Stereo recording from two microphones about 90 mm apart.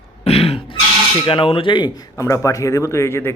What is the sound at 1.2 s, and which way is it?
Speech, 80° left.